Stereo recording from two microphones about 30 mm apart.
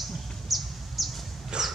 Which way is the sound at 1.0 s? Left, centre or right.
Centre.